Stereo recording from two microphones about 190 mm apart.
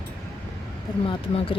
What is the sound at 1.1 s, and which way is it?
Speech, 30° left (ahead or behind).